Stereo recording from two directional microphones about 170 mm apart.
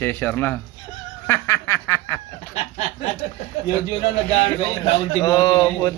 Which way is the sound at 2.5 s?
45° left (ahead or behind).